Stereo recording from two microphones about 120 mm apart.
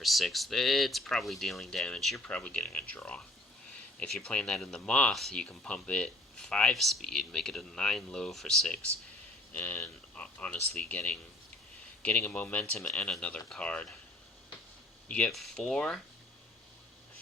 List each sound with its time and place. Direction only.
0.0 s speech: centre (ahead or behind)
9.5 s speech: 15° left (ahead or behind)
15.0 s speech: 10° left (ahead or behind)